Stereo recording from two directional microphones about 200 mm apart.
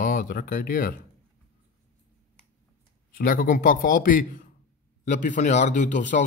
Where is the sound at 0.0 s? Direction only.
40° left (ahead or behind).